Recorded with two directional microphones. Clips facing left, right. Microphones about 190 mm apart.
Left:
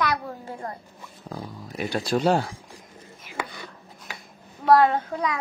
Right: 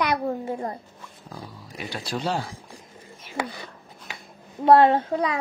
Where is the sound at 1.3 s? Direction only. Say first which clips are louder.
Left 5 dB; 60° left (ahead or behind).